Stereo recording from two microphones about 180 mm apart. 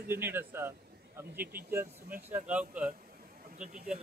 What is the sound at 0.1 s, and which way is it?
Speech, 10° right (ahead or behind).